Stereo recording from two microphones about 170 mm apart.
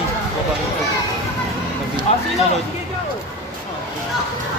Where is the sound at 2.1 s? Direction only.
40° left (ahead or behind).